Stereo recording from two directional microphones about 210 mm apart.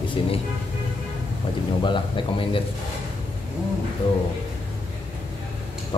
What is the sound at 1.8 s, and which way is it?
Speech, 25° left (ahead or behind).